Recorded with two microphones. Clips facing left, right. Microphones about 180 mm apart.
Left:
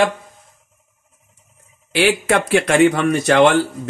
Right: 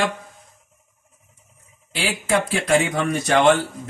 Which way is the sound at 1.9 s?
70° left (ahead or behind).